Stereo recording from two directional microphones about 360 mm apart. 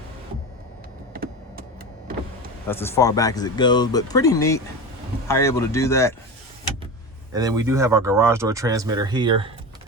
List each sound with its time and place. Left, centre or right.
1.1 s a sound: right
2.6 s speech: centre
7.3 s speech: centre